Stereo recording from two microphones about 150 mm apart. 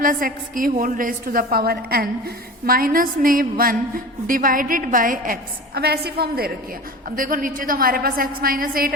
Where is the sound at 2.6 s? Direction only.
75° right (ahead or behind); by 6.5 s 90° right.